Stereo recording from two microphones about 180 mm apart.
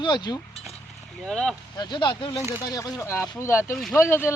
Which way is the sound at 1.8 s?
25° left (ahead or behind).